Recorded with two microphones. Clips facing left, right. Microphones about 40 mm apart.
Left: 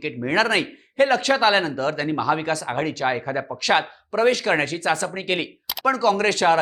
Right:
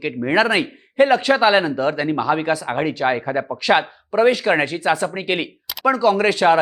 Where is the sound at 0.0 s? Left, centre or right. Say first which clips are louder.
Right 3 dB; centre.